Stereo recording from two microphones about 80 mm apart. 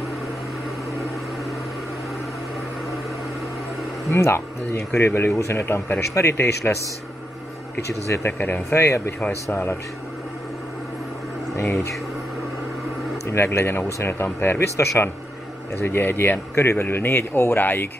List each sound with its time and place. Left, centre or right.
4.1 s speech: left
8.3 s speech: left
13.3 s speech: left